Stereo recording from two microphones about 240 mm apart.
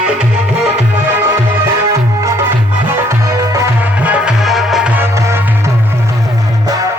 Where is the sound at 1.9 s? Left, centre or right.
Centre.